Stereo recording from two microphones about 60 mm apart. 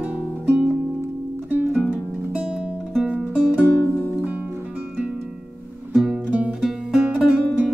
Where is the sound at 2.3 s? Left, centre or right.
Centre.